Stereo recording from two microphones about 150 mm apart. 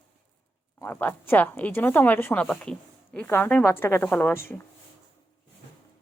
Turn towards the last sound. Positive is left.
turn(degrees=10)  # may be behind; listen again after turning